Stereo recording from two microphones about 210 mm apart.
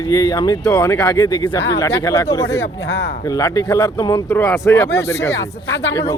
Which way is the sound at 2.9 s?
50° left (ahead or behind).